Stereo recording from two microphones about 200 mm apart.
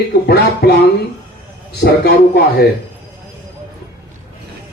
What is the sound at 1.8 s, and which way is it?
Speech, 55° left (ahead or behind).